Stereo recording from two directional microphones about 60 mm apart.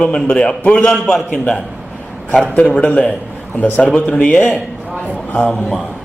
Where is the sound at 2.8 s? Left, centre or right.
Left.